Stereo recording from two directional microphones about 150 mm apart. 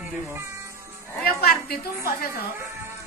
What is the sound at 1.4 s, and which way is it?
Speech, 90° left.